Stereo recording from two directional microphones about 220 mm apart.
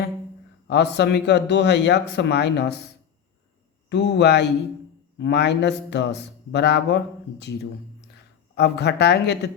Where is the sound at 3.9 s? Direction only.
50° left (ahead or behind).